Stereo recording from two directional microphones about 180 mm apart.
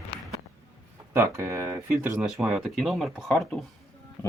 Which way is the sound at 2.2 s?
Centre (ahead or behind).